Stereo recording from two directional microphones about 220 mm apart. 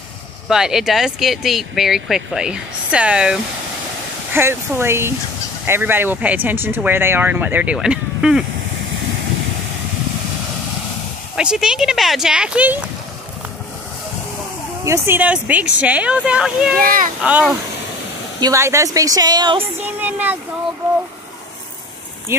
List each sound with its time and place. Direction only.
0.5 s speech: centre (ahead or behind)
11.3 s speech: 5° right (ahead or behind)
14.9 s speech: 10° right (ahead or behind)
16.8 s a child's voice: 40° right (ahead or behind)
17.2 s speech: 5° right (ahead or behind)
19.8 s speech: 10° right (ahead or behind)